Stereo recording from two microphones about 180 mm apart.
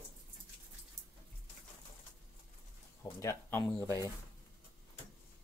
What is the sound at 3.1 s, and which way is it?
Speech, 10° left (ahead or behind).